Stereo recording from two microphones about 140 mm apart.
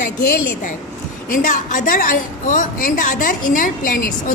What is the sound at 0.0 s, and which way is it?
Speech, 70° left (ahead or behind).